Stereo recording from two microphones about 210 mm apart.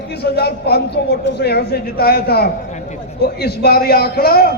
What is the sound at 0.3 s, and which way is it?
A man's voice, 50° left (ahead or behind).